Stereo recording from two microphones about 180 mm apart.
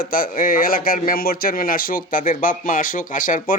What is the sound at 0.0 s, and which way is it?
Speech, 50° left (ahead or behind).